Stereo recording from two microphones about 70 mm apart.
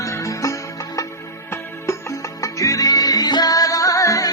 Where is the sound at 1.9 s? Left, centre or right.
Left.